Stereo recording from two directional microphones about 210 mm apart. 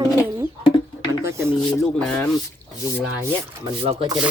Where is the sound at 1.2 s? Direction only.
10° right (ahead or behind).